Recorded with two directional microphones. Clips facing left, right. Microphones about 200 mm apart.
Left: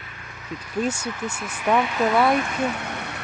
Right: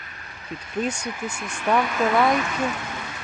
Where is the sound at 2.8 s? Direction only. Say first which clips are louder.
Left 2 dB; 65° left (ahead or behind).